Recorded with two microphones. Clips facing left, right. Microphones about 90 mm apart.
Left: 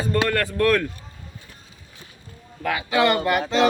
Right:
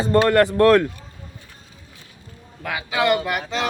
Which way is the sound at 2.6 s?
5° right (ahead or behind).